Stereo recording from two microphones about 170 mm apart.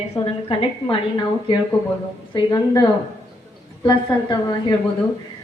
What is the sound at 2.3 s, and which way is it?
A woman's voice, 25° left (ahead or behind).